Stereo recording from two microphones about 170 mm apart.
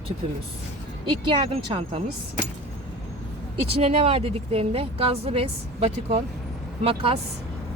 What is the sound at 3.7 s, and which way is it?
A woman's voice, 35° right (ahead or behind).